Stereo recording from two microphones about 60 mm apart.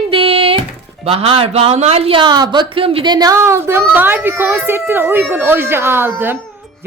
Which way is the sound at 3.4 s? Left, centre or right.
Right.